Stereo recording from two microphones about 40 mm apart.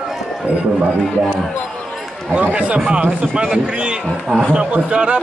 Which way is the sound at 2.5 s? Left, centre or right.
Right.